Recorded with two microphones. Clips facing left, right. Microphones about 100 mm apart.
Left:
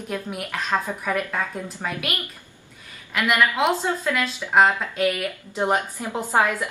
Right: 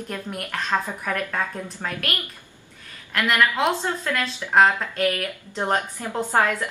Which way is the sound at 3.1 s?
5° left (ahead or behind).